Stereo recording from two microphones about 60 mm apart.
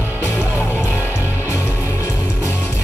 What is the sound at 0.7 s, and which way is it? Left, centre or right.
Music, left.